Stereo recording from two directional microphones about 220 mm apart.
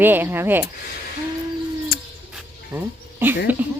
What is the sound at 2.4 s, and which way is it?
Dog, 10° right (ahead or behind).